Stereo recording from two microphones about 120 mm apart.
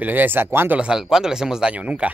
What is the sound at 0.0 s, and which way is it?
Speech, 15° right (ahead or behind).